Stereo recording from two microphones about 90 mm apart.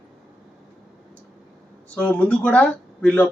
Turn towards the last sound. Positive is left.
turn(degrees=15)  # may be behind; listen again after turning